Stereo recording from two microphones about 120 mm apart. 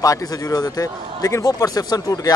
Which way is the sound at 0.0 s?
30° left (ahead or behind).